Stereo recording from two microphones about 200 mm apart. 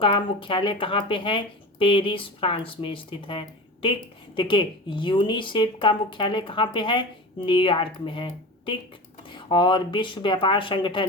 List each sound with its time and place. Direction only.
0.0 s speech: 25° left (ahead or behind)